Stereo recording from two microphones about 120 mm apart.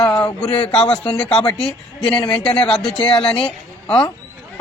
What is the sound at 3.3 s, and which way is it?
Speech, 5° left (ahead or behind).